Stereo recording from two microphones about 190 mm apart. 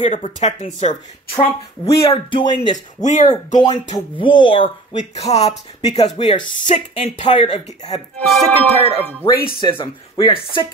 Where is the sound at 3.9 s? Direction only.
25° left (ahead or behind).